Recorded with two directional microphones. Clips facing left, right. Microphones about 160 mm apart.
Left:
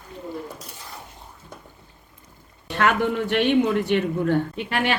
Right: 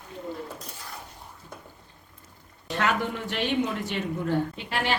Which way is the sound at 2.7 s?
60° left (ahead or behind).